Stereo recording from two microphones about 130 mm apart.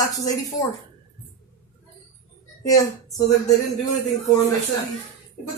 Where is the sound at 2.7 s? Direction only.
25° left (ahead or behind).